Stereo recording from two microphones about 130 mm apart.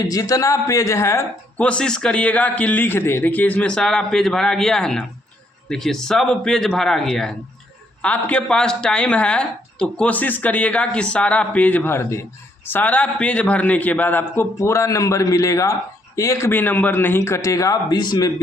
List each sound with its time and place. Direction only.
0.0 s a man's voice: 25° left (ahead or behind)
1.5 s a man's voice: 10° left (ahead or behind); by 18.3 s 35° left (ahead or behind)